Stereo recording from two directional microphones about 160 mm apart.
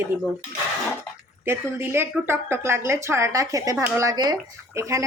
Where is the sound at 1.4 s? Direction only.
15° right (ahead or behind).